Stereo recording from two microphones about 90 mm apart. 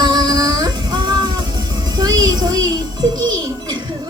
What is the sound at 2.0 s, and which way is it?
Music, 45° right (ahead or behind).